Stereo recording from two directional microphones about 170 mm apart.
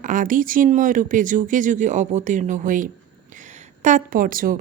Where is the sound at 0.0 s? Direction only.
50° right (ahead or behind).